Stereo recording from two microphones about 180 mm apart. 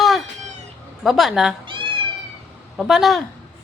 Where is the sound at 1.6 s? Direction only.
25° right (ahead or behind).